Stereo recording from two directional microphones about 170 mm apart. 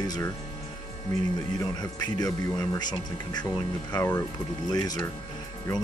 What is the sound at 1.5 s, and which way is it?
Speech, 20° left (ahead or behind).